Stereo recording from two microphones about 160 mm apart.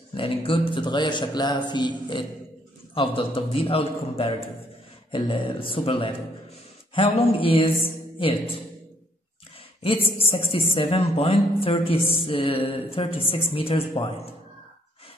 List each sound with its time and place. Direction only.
0.1 s a woman's voice: 35° left (ahead or behind)
9.8 s a woman's voice: 35° left (ahead or behind)